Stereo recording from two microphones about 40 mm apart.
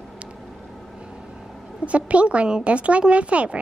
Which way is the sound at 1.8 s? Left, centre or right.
Right.